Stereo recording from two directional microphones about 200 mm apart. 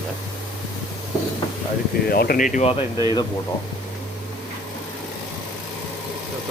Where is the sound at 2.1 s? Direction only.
50° left (ahead or behind).